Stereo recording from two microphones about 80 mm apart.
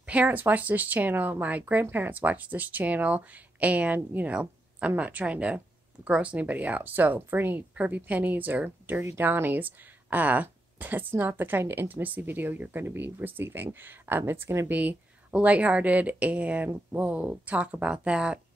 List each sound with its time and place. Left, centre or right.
0.0 s speech: centre
14.7 s speech: centre